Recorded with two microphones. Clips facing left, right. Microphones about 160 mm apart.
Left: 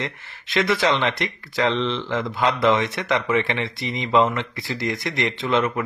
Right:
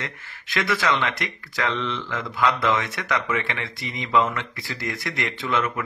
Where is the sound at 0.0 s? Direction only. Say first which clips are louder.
Left 5 dB; 25° left (ahead or behind).